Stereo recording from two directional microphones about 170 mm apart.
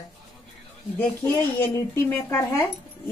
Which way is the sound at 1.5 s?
15° left (ahead or behind).